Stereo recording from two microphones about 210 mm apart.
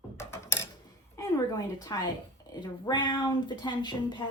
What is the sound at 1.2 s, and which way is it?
A woman's voice, 15° left (ahead or behind).